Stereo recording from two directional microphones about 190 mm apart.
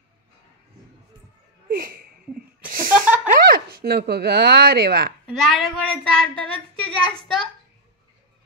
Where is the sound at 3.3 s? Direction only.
50° right (ahead or behind).